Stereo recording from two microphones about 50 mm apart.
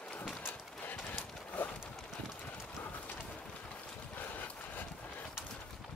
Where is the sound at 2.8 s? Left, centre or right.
Left.